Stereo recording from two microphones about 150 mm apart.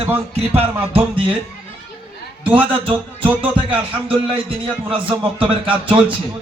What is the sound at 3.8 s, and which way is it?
A man's voice, 35° right (ahead or behind).